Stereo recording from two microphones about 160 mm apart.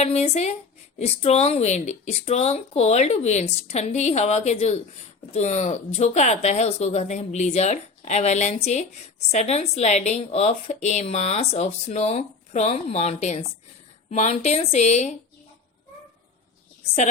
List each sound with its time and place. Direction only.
0.0 s a woman's voice: 40° left (ahead or behind)